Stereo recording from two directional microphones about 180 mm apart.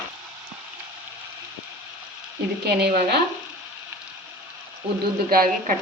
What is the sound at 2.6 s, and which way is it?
Speech, 65° right (ahead or behind).